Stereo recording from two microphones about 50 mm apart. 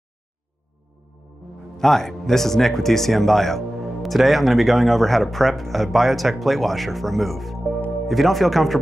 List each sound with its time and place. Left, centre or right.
1.8 s speech: centre